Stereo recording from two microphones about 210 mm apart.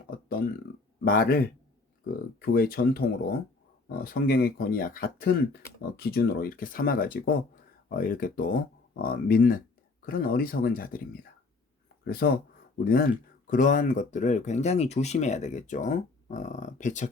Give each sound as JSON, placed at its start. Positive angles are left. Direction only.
{"t": 0.3, "sound": "speech", "side_deg": 45}
{"t": 4.0, "sound": "speech", "side_deg": 45}